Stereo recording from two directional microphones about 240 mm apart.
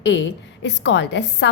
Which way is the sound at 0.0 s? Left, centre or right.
Left.